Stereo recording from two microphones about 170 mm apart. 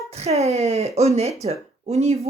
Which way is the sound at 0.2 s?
40° right (ahead or behind).